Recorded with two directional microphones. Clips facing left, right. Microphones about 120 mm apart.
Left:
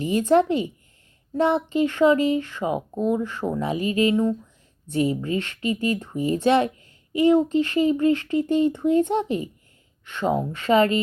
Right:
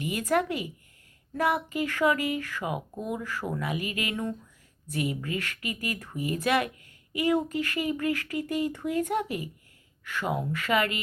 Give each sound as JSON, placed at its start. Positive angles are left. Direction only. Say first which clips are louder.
{"t": 0.0, "sound": "speech", "louder": "left 8 dB", "side_deg": 30}
{"t": 4.1, "sound": "speech", "louder": "left 11 dB", "side_deg": 15}
{"t": 4.9, "sound": "speech", "louder": "left 8 dB", "side_deg": 30}